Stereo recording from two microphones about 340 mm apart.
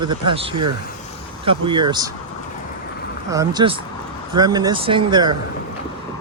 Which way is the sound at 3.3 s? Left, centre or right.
Centre.